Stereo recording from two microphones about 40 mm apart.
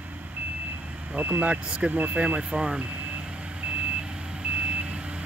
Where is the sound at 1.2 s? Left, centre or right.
Right.